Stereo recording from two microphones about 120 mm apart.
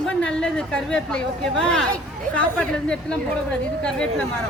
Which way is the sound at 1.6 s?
5° left (ahead or behind).